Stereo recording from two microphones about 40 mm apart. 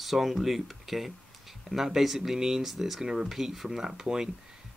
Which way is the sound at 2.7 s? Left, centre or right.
Centre.